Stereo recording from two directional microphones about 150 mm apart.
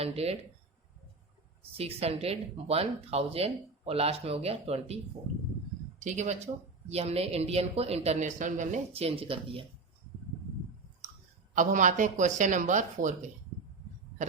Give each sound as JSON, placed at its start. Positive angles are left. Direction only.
{"t": 0.0, "sound": "speech", "side_deg": -40}
{"t": 1.7, "sound": "speech", "side_deg": -40}
{"t": 6.0, "sound": "speech", "side_deg": -50}
{"t": 8.9, "sound": "speech", "side_deg": -40}
{"t": 11.5, "sound": "speech", "side_deg": -60}